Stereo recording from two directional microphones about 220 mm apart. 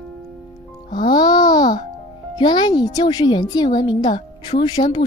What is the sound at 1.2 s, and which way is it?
Babbling, 15° left (ahead or behind).